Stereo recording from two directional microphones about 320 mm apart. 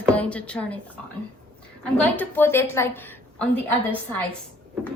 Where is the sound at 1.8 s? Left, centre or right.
Centre.